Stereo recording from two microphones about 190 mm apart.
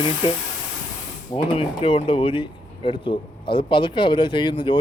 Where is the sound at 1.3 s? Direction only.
25° left (ahead or behind).